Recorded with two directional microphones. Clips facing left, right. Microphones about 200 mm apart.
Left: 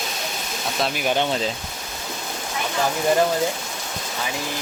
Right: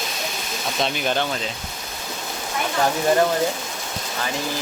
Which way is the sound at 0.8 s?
10° left (ahead or behind).